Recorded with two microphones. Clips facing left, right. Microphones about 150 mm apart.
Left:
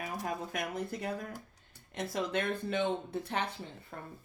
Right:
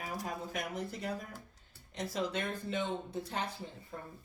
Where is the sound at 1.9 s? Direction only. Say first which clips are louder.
Left 2 dB; 60° left (ahead or behind).